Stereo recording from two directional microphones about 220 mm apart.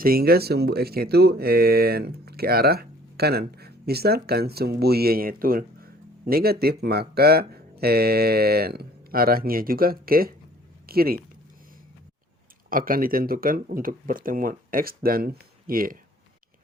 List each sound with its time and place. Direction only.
0.0 s speech: 45° right (ahead or behind)
12.7 s speech: 40° right (ahead or behind)